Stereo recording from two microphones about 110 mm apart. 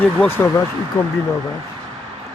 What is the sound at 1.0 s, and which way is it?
Speech, 25° left (ahead or behind).